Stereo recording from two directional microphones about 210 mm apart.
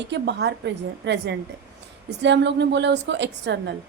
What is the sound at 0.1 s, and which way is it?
A woman's voice, 55° right (ahead or behind).